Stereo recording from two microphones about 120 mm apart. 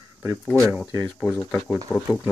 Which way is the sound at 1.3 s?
20° left (ahead or behind).